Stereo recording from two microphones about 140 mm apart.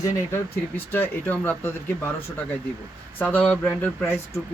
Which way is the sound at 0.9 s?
15° left (ahead or behind).